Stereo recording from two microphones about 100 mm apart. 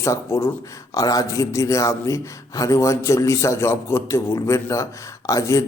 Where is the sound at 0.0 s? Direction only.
30° left (ahead or behind).